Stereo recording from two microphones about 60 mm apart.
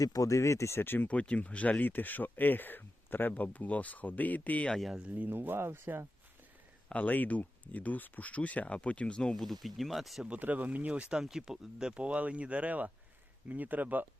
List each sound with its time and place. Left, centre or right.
0.0 s speech: left
1.0 s speech: left
4.7 s speech: centre
4.9 s speech: right
5.3 s speech: right
6.8 s speech: left
9.4 s speech: centre
10.4 s speech: right